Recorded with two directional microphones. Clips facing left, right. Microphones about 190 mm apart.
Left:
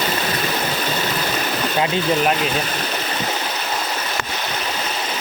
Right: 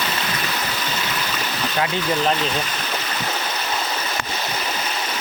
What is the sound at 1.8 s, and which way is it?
Speech, 20° left (ahead or behind).